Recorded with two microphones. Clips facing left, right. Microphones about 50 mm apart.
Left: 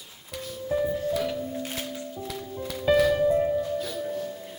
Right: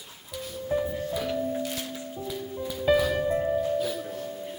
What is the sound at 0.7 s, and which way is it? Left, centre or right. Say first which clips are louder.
Music: left 1 dB; right.